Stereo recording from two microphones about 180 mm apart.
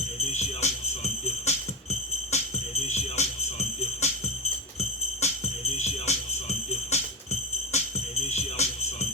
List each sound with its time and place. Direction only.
0.2 s music: 35° left (ahead or behind)
4.8 s jingle bell: 35° left (ahead or behind)